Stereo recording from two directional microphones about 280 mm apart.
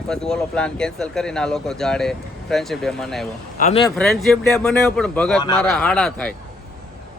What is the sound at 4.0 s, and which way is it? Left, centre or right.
Speech, centre.